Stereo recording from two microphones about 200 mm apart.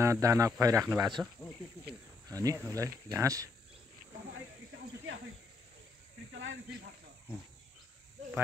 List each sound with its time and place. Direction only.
0.0 s speech: 15° right (ahead or behind)
2.2 s speech: 15° right (ahead or behind)
6.3 s snake: 70° right (ahead or behind)